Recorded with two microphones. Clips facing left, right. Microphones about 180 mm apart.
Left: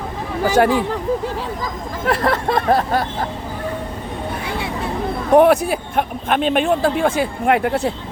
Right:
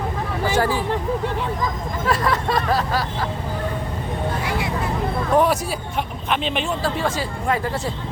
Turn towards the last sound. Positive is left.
turn(degrees=65)  # may be behind; listen again after turning